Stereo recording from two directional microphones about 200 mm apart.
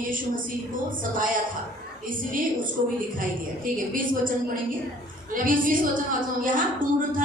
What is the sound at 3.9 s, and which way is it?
A woman's voice, 45° right (ahead or behind).